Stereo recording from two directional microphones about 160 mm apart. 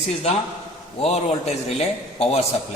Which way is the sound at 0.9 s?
40° left (ahead or behind).